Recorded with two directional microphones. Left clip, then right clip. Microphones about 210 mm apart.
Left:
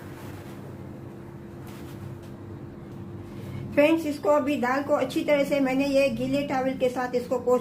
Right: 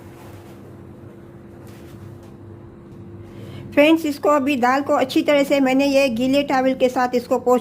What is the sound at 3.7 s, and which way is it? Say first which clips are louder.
A woman's voice: right 6 dB; 50° right (ahead or behind).